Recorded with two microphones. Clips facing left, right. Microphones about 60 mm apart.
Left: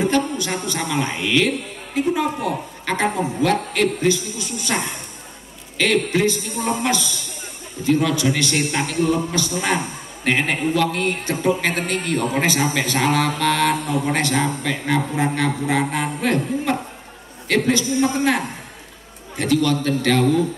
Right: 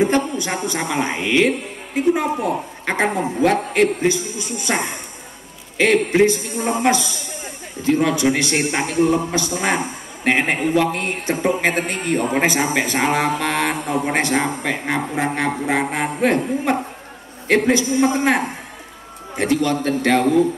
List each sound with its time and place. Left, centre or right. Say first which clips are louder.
0.0 s a man's voice: right 2 dB; right